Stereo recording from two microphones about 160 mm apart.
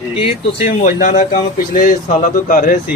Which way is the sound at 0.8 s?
55° left (ahead or behind).